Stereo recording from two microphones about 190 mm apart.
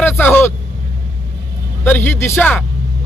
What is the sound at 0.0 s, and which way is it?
Vehicle, 10° left (ahead or behind).